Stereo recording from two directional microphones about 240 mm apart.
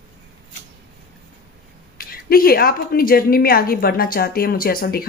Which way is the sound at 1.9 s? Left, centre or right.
Left.